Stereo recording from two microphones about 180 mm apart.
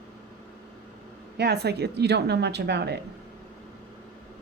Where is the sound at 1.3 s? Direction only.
65° right (ahead or behind).